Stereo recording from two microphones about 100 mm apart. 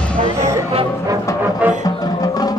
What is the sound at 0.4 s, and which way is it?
Music, 30° right (ahead or behind).